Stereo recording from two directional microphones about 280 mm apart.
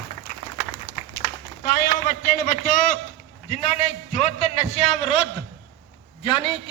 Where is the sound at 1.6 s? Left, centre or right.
Left.